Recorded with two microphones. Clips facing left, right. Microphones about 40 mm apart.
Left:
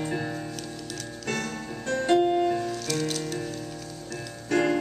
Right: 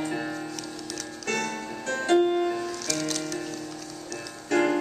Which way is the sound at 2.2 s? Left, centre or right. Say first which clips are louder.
Left 1 dB; centre.